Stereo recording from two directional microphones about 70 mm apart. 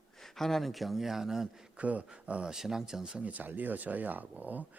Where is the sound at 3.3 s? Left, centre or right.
Right.